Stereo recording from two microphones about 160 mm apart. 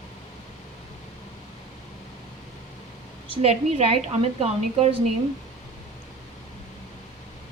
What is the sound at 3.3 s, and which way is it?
A woman's voice, 40° right (ahead or behind).